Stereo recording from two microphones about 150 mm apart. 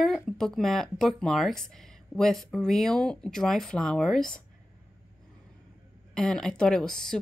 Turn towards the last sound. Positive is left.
turn(degrees=5)  # may be behind; listen again after turning